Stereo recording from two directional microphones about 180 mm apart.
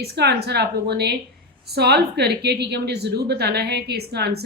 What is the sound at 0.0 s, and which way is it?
A woman's voice, 65° right (ahead or behind).